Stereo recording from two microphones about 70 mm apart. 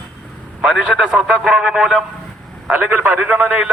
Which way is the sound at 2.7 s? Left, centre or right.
Right.